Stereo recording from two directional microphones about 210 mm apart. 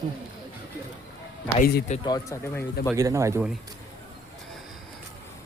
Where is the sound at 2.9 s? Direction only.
15° right (ahead or behind).